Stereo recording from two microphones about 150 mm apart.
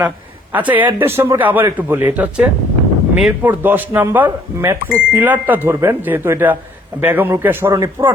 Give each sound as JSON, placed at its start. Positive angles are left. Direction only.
{"t": 0.5, "sound": "speech", "side_deg": -10}